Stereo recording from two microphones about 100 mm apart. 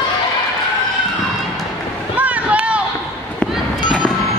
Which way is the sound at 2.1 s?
15° right (ahead or behind).